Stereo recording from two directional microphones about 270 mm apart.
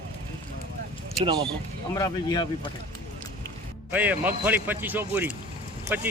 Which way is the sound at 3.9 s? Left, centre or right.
Centre.